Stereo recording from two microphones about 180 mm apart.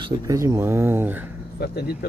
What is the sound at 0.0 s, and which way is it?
Speech, 20° right (ahead or behind).